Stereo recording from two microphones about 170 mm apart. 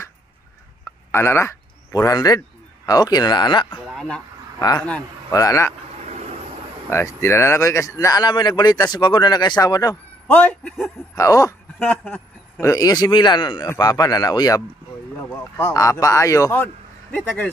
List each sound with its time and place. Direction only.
0.8 s a sound: 15° left (ahead or behind)
2.9 s speech: 25° left (ahead or behind)
3.8 s a man's voice: centre (ahead or behind)
4.6 s speech: 20° left (ahead or behind)
6.9 s speech: 15° left (ahead or behind)
10.3 s speech: 5° left (ahead or behind)
11.1 s speech: 20° left (ahead or behind)
11.8 s speech: 10° left (ahead or behind)